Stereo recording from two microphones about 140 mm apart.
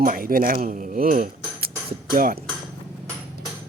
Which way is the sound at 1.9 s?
90° right.